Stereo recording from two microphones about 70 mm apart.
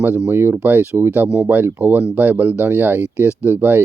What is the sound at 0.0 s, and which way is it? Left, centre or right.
Speech, right.